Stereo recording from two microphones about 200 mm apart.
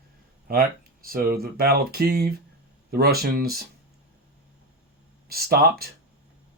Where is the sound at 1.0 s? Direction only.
45° right (ahead or behind).